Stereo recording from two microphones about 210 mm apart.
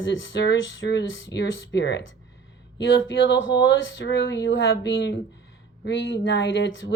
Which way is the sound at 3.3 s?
60° left (ahead or behind).